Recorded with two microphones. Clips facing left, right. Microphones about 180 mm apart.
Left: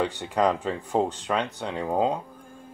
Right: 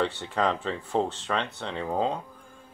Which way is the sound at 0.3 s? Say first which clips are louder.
Left 3 dB; 10° left (ahead or behind).